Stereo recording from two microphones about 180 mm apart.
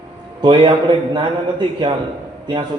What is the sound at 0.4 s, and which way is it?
A man's voice, 25° right (ahead or behind).